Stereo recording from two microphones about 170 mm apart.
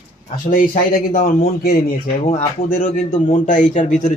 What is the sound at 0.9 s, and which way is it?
Speech, 55° left (ahead or behind).